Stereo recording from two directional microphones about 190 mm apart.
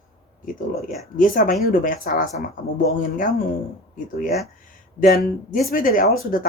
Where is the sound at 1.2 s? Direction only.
45° left (ahead or behind).